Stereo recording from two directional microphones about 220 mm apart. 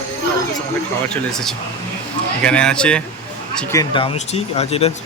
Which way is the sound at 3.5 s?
15° left (ahead or behind).